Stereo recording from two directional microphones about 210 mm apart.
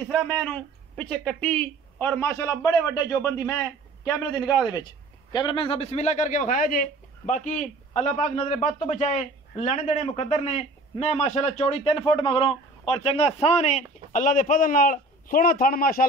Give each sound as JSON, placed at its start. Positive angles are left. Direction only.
{"t": 0.1, "sound": "speech", "side_deg": 5}
{"t": 5.3, "sound": "a man's voice", "side_deg": 20}